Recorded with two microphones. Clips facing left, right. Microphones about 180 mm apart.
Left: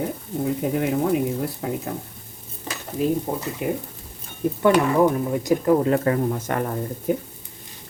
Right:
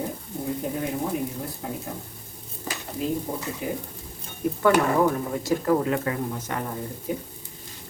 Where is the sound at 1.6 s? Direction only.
75° left (ahead or behind).